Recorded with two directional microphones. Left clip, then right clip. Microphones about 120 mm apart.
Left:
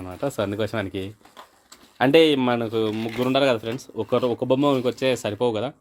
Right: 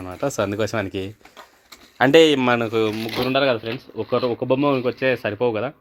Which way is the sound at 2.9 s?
30° left (ahead or behind).